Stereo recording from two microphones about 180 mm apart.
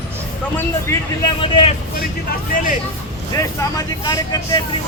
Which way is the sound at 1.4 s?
30° left (ahead or behind).